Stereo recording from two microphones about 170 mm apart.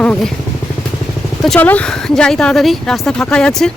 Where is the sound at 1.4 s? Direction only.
5° left (ahead or behind).